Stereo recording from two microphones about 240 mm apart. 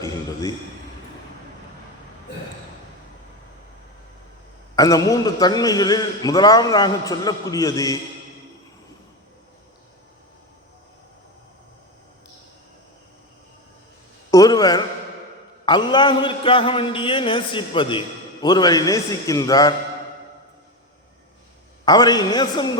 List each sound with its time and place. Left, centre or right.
4.7 s a man's voice: centre
14.3 s a man's voice: centre
21.8 s a man's voice: centre